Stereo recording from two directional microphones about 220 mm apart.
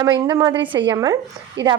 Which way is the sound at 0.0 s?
15° right (ahead or behind).